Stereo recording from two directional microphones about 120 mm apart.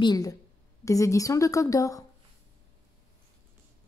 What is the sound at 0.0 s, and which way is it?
A woman's voice, 30° left (ahead or behind).